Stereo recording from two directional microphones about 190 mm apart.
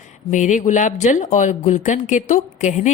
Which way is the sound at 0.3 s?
40° left (ahead or behind).